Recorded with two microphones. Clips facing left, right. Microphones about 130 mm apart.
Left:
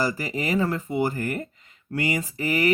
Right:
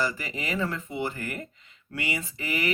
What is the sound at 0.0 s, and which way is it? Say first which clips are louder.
Speech: left 4 dB; 40° left (ahead or behind).